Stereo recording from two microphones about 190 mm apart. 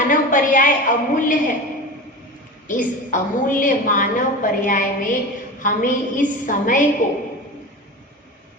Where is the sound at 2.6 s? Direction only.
40° left (ahead or behind).